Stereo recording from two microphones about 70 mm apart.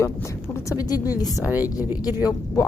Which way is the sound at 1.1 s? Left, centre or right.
Left.